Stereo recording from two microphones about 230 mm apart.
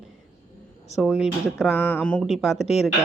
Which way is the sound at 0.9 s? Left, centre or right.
Centre.